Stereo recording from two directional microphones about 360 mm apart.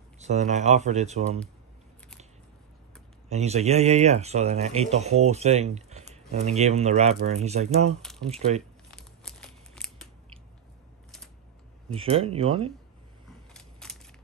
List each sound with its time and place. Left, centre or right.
0.2 s speech: centre
3.3 s speech: centre
8.9 s crumpling: centre
11.9 s speech: centre
13.5 s a sound: centre